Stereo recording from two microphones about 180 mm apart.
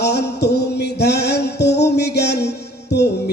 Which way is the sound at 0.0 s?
70° left (ahead or behind).